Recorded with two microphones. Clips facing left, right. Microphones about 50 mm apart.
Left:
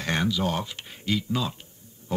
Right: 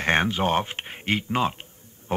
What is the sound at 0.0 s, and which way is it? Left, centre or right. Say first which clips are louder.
Speech: right 4 dB; right.